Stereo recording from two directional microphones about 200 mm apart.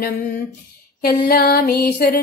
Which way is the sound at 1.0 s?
50° left (ahead or behind).